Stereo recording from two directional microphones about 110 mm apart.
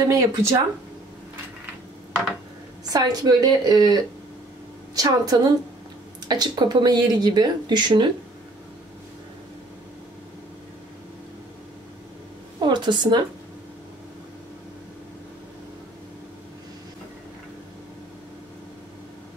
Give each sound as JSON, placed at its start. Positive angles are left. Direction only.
{"t": 0.1, "sound": "speech", "side_deg": -30}
{"t": 2.9, "sound": "speech", "side_deg": -35}
{"t": 12.5, "sound": "a sound", "side_deg": -40}